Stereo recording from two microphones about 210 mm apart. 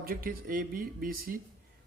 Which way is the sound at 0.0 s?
45° right (ahead or behind).